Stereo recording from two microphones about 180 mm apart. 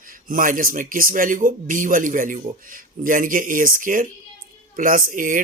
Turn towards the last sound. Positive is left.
turn(degrees=-50)  # may be behind; listen again after turning